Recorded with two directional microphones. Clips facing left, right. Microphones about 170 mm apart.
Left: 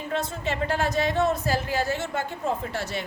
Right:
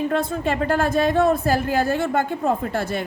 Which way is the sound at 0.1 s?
55° right (ahead or behind).